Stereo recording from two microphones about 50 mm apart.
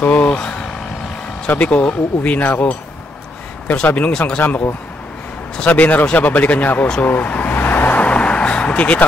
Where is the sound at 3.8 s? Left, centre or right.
Left.